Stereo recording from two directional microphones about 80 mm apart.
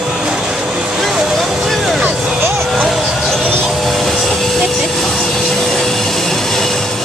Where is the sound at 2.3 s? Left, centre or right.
Right.